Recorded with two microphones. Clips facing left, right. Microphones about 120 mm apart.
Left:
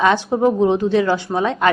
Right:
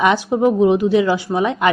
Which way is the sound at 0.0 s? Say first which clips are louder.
Even; 15° right (ahead or behind).